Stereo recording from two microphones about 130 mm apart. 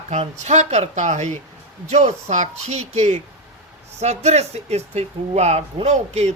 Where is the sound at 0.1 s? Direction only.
60° right (ahead or behind).